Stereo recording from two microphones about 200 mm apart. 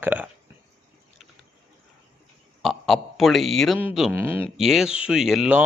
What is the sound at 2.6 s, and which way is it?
Speech, centre (ahead or behind).